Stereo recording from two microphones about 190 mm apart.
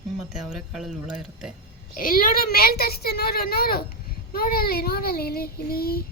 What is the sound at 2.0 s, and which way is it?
A child's voice, 45° left (ahead or behind).